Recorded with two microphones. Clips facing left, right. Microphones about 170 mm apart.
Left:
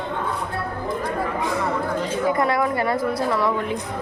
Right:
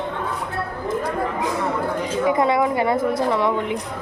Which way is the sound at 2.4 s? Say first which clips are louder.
Right 2 dB; 20° right (ahead or behind).